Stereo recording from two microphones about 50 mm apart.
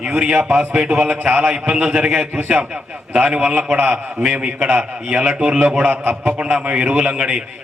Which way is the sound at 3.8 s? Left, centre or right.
Centre.